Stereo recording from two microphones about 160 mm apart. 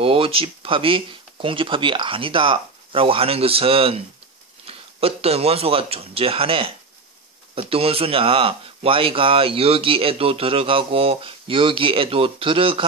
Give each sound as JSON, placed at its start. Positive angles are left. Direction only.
{"t": 0.0, "sound": "speech", "side_deg": -35}
{"t": 7.7, "sound": "speech", "side_deg": -35}